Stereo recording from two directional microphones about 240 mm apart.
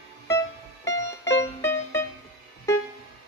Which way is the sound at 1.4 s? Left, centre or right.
Centre.